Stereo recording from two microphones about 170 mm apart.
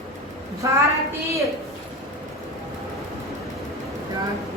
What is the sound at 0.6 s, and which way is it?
Speech, 20° right (ahead or behind).